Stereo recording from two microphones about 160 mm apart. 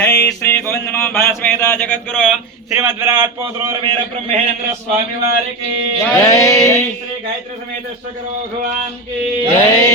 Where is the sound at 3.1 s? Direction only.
20° right (ahead or behind).